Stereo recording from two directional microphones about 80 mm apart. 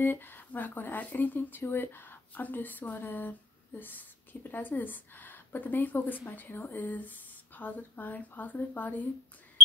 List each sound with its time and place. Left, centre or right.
0.0 s a woman's voice: left